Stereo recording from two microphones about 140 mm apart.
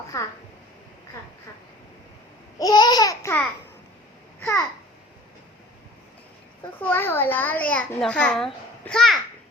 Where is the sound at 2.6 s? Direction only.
30° left (ahead or behind).